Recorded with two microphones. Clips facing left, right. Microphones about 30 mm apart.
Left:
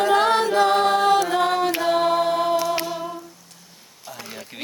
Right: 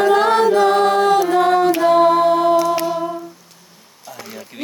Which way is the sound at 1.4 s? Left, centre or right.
Centre.